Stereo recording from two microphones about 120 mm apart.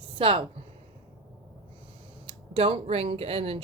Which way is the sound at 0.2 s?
50° right (ahead or behind).